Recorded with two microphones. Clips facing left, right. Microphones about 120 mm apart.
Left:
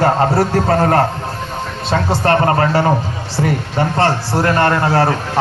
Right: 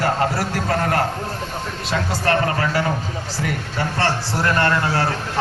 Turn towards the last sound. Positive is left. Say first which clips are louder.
# left 7 dB
turn(degrees=45)  # may be behind; listen again after turning